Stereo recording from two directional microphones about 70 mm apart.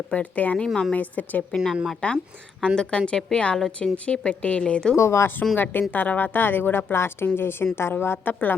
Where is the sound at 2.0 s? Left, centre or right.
Centre.